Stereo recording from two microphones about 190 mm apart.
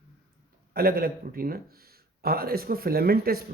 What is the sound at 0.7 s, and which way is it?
Speech, 50° right (ahead or behind).